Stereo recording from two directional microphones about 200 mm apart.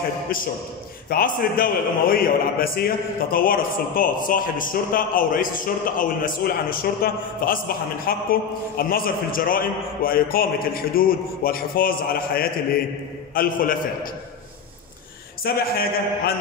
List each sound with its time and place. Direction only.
1.1 s a man's voice: 45° left (ahead or behind)
15.4 s a man's voice: 50° left (ahead or behind)